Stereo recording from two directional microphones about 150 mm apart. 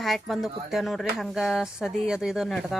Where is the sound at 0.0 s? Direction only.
Centre (ahead or behind).